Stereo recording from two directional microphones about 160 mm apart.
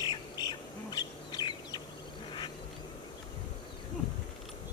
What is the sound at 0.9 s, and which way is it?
Chicken, 25° left (ahead or behind).